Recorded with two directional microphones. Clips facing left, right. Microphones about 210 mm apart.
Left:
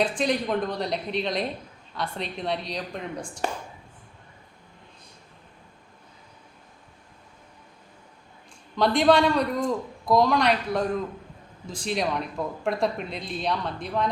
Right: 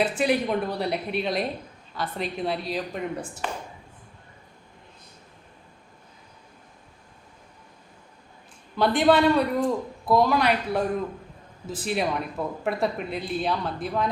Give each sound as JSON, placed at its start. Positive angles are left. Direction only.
{"t": 0.0, "sound": "a woman's voice", "side_deg": -5}
{"t": 8.7, "sound": "a man's voice", "side_deg": -5}